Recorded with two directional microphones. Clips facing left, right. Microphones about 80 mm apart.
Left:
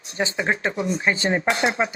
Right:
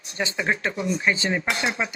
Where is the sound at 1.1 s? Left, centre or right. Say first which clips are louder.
Left 4 dB; left.